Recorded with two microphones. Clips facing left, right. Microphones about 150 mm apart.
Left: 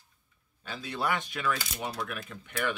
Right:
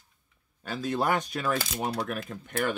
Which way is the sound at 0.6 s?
45° right (ahead or behind).